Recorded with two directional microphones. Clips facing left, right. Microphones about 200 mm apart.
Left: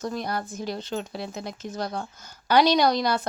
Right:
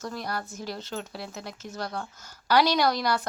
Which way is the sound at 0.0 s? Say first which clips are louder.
Left 4 dB; 20° left (ahead or behind).